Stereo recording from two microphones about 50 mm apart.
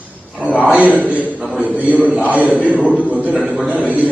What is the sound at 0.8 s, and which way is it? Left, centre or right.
A man's voice, right.